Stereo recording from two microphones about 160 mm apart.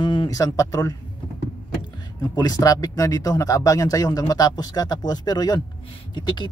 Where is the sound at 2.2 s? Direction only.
25° left (ahead or behind).